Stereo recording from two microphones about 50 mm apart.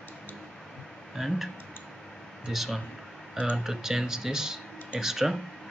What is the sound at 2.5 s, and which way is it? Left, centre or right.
Speech, centre.